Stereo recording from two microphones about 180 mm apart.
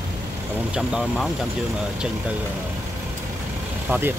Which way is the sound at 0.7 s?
5° right (ahead or behind).